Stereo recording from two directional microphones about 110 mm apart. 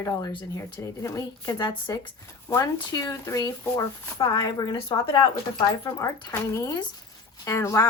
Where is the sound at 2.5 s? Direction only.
20° left (ahead or behind).